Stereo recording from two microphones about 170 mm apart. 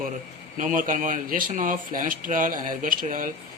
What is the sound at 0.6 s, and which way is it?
Speech, 50° right (ahead or behind).